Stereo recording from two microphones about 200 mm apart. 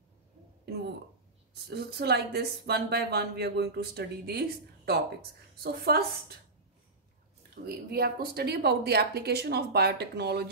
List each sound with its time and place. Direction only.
1.5 s speech: 55° right (ahead or behind)
7.6 s speech: 50° right (ahead or behind)